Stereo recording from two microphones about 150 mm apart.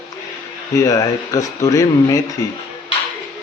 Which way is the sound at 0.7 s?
20° left (ahead or behind).